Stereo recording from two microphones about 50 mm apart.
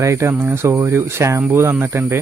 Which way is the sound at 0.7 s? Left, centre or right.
Right.